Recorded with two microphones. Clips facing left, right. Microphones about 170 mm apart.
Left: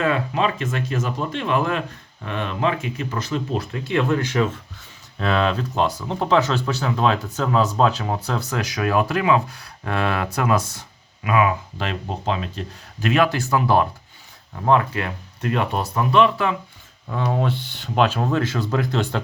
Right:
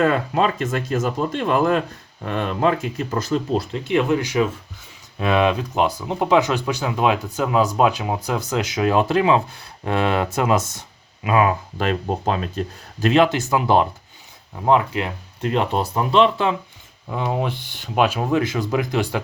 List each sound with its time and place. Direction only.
0.0 s speech: 45° right (ahead or behind)
3.8 s speech: 15° right (ahead or behind)
11.3 s speech: 40° right (ahead or behind)
13.1 s speech: 25° right (ahead or behind)
17.1 s speech: 15° right (ahead or behind)